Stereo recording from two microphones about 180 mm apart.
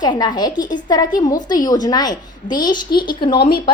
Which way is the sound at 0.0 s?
25° left (ahead or behind).